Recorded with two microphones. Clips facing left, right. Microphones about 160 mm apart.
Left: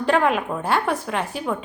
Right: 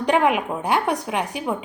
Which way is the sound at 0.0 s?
15° right (ahead or behind).